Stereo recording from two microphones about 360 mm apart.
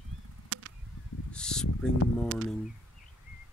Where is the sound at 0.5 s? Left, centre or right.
Right.